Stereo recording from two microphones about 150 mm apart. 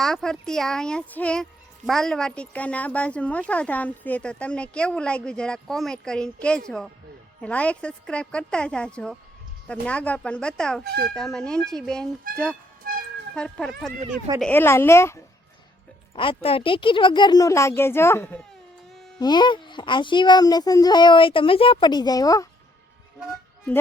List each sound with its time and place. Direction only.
0.0 s speech: 5° left (ahead or behind)
12.3 s speech: 70° right (ahead or behind)
12.8 s a sound: 75° right (ahead or behind)
13.3 s speech: 5° left (ahead or behind)
14.5 s speech: 15° left (ahead or behind)
16.1 s a child's voice: 35° left (ahead or behind); by 18.3 s 15° left (ahead or behind)
19.2 s a child's voice: 30° left (ahead or behind)